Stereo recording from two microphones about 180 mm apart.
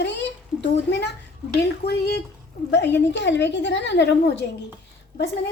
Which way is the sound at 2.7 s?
75° left (ahead or behind).